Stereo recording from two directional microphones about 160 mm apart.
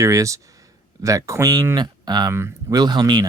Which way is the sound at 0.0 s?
20° right (ahead or behind).